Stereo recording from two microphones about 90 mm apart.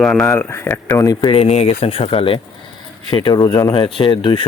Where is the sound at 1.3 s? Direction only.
90° left; by 4.5 s 70° left (ahead or behind).